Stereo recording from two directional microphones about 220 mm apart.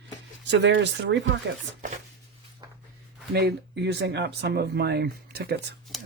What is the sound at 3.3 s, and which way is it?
Speech, 50° right (ahead or behind).